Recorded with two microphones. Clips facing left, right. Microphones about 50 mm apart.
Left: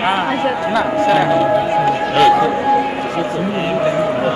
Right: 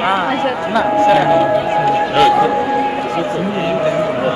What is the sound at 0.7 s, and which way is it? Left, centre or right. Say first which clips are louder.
Speech: right 4 dB; centre.